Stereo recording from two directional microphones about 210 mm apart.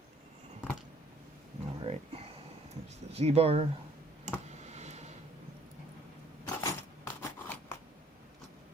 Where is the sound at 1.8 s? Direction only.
30° right (ahead or behind).